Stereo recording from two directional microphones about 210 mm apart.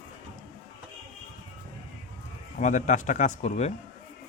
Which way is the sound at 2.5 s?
35° left (ahead or behind).